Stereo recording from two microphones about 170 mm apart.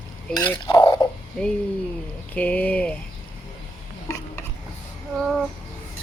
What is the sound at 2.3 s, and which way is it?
Speech, 10° left (ahead or behind).